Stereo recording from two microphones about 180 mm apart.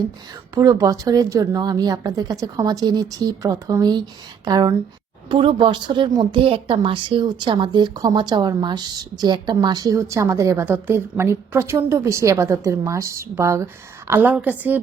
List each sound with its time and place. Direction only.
0.5 s a woman's voice: 20° right (ahead or behind)